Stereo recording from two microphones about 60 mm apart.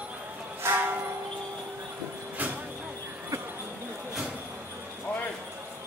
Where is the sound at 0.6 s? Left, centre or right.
Right.